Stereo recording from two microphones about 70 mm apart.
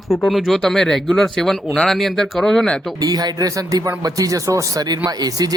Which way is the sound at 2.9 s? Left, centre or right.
Right.